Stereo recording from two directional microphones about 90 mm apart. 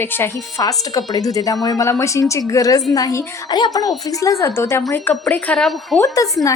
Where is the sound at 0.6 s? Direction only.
45° left (ahead or behind).